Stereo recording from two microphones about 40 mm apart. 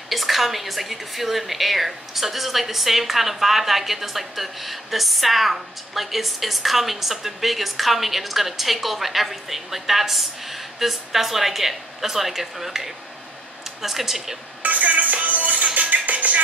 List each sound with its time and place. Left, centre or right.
0.1 s a woman's voice: centre
14.6 s music: right